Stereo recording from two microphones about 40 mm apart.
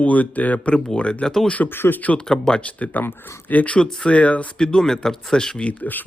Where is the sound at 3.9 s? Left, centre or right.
Left.